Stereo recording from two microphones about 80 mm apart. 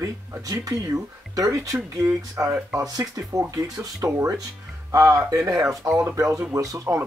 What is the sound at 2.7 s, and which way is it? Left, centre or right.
Speech, right.